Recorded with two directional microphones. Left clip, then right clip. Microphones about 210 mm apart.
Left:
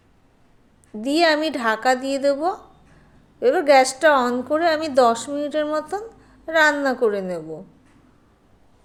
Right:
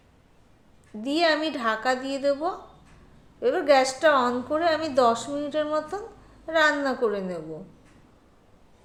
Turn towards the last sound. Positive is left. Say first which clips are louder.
# left 5 dB
turn(degrees=40)  # may be behind; listen again after turning